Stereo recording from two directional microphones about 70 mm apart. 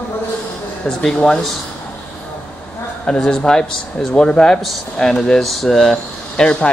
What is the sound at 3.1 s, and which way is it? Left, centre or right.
Speech, centre.